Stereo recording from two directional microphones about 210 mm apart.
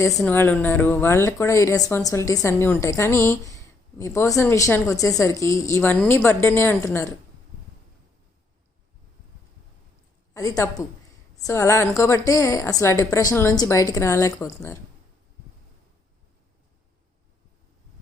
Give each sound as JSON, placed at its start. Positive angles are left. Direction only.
{"t": 0.2, "sound": "speech", "side_deg": 10}
{"t": 10.3, "sound": "speech", "side_deg": 15}